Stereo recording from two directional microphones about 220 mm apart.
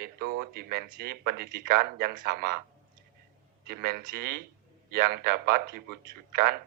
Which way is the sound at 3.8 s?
45° right (ahead or behind).